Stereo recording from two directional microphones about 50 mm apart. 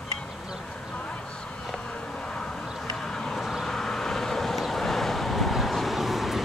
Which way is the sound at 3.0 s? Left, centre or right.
Centre.